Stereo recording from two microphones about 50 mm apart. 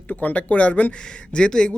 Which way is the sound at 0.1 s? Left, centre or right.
Left.